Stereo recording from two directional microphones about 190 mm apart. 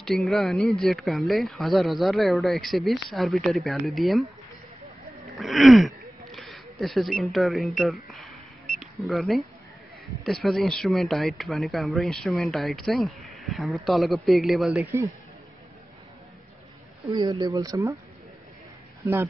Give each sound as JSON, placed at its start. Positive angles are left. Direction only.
{"t": 0.2, "sound": "speech", "side_deg": 0}
{"t": 5.3, "sound": "a sound", "side_deg": 0}
{"t": 9.0, "sound": "speech", "side_deg": 0}
{"t": 17.1, "sound": "speech", "side_deg": -20}